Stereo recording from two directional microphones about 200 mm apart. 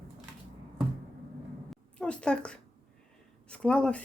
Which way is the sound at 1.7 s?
5° left (ahead or behind).